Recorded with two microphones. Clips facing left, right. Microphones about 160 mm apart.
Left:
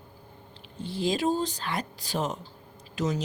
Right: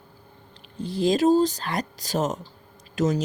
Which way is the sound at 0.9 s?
40° right (ahead or behind).